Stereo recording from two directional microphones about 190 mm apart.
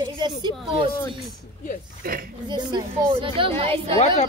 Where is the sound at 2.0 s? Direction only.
50° right (ahead or behind).